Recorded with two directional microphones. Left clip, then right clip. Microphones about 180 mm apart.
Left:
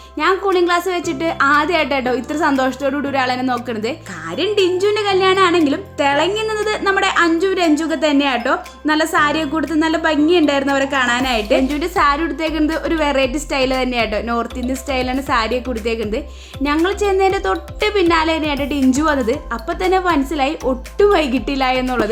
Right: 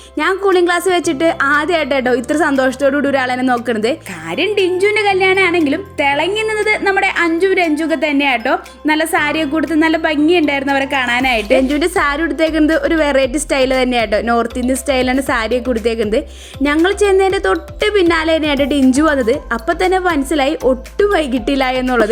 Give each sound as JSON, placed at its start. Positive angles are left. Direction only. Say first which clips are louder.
{"t": 0.2, "sound": "a woman's voice", "louder": "right 2 dB", "side_deg": -30}
{"t": 4.4, "sound": "a woman's voice", "louder": "right 2 dB", "side_deg": -5}
{"t": 11.8, "sound": "a woman's voice", "louder": "right 1 dB", "side_deg": -30}